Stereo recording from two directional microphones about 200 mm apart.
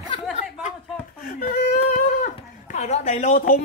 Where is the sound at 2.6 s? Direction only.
35° left (ahead or behind).